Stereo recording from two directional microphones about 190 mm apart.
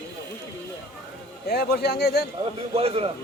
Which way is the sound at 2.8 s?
30° right (ahead or behind).